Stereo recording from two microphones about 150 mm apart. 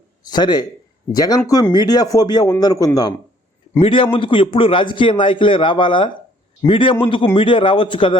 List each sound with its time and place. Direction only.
0.3 s speech: 30° left (ahead or behind)
3.8 s a man's voice: 35° left (ahead or behind)